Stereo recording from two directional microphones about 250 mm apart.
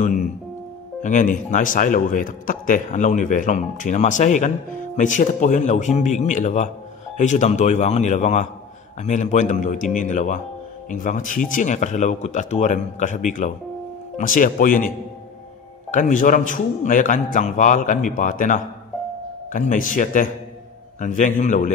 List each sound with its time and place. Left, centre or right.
1.0 s a man's voice: left
15.9 s a man's voice: left